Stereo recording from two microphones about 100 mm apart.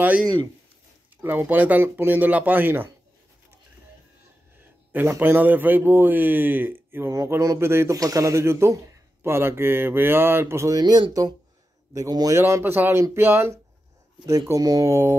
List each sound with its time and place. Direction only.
1.1 s speech: 20° right (ahead or behind)
5.2 s a man's voice: 20° right (ahead or behind)
10.8 s speech: 45° right (ahead or behind)
12.4 s a man's voice: 25° right (ahead or behind)